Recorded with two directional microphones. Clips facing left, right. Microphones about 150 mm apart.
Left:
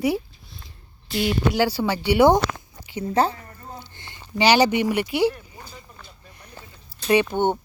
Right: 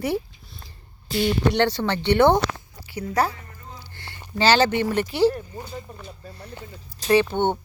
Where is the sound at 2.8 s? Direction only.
20° left (ahead or behind).